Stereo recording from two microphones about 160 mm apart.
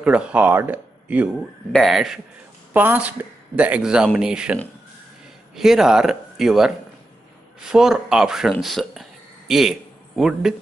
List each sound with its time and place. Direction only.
0.0 s speech: 5° right (ahead or behind)
2.7 s speech: 10° right (ahead or behind)
5.6 s speech: 5° right (ahead or behind)
7.7 s a man's voice: 5° right (ahead or behind)